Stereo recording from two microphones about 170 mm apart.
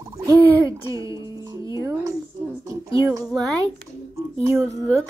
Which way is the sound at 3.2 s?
Centre (ahead or behind).